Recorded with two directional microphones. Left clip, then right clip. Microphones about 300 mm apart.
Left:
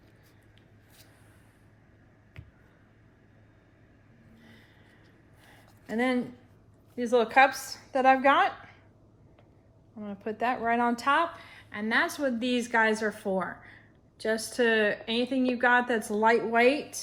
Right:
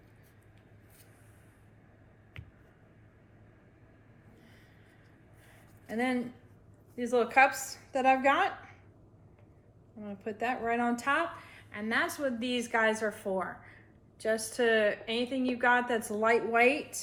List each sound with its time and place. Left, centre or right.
5.9 s a woman's voice: left
10.0 s a woman's voice: left